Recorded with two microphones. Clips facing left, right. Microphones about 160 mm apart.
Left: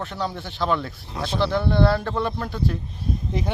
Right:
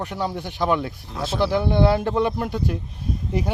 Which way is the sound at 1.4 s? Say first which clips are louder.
Right 1 dB; 15° right (ahead or behind).